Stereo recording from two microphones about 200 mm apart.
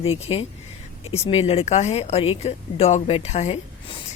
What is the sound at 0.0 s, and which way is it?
A woman's voice, 30° left (ahead or behind).